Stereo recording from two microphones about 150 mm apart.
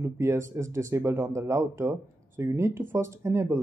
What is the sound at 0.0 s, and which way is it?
Speech, 20° right (ahead or behind).